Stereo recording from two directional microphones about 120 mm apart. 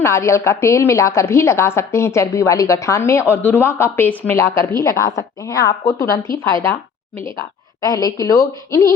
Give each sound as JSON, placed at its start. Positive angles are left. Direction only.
{"t": 0.0, "sound": "a woman's voice", "side_deg": 20}
{"t": 7.8, "sound": "a woman's voice", "side_deg": 30}